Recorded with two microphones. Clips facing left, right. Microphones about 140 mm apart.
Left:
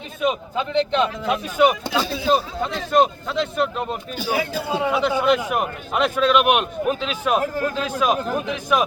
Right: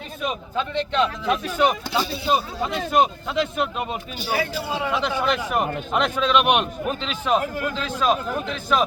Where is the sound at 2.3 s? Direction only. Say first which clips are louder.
Left 1 dB; 5° right (ahead or behind).